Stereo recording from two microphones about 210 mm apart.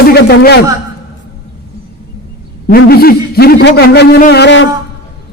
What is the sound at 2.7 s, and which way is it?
A man's voice, 45° left (ahead or behind).